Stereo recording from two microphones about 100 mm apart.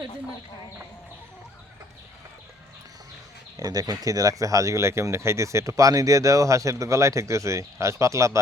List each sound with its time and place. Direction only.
3.6 s speech: 40° right (ahead or behind)